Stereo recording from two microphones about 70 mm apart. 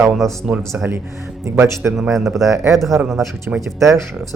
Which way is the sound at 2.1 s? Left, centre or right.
Centre.